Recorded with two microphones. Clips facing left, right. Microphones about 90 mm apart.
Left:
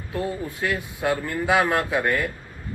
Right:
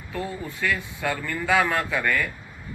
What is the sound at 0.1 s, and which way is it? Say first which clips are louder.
Speech: left 3 dB; 20° left (ahead or behind).